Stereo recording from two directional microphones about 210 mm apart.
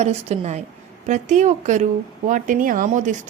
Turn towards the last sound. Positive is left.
turn(degrees=-35)  # may be behind; listen again after turning